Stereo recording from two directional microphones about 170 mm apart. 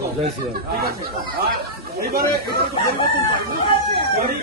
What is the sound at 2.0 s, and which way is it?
Speech, 65° right (ahead or behind).